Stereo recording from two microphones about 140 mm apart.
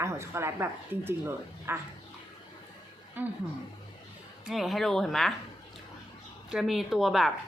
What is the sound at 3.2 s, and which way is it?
Speech, 10° right (ahead or behind).